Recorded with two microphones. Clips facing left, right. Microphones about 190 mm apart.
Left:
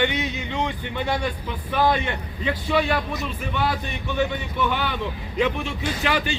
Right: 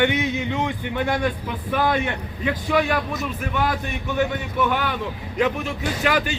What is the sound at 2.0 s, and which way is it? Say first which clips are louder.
A man's voice: right 2 dB; 10° right (ahead or behind).